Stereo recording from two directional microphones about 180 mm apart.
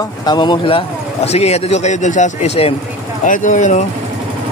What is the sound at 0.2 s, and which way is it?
A man's voice, 25° left (ahead or behind).